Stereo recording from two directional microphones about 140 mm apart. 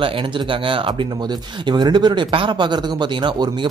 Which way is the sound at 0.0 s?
35° right (ahead or behind).